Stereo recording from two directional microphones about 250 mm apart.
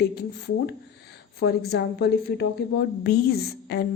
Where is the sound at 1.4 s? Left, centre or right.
Left.